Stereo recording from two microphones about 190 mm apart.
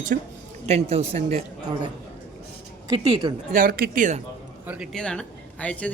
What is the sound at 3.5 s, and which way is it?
Speech, 50° right (ahead or behind).